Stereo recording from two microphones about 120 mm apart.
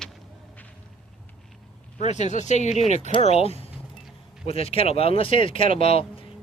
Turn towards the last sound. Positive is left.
turn(degrees=55)  # may be behind; listen again after turning